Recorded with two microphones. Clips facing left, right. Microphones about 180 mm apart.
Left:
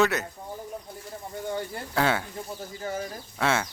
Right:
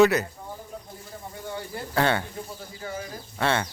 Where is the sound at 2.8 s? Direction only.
40° left (ahead or behind).